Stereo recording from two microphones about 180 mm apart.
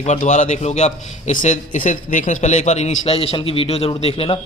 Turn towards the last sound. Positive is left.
turn(degrees=35)  # may be behind; listen again after turning